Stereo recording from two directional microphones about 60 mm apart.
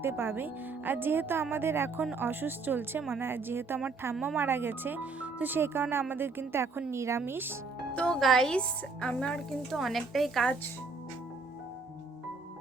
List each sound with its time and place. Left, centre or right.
0.0 s a woman's voice: right
7.3 s speech: right
7.9 s music: centre
8.2 s a woman's voice: centre
9.6 s speech: centre